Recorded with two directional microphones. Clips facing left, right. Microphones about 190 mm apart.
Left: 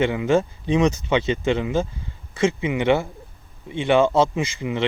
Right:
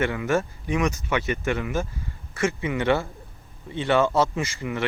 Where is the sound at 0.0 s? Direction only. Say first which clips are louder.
Left 4 dB; 20° left (ahead or behind).